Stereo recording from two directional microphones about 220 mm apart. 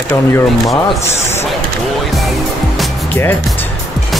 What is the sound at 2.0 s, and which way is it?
Music, centre (ahead or behind).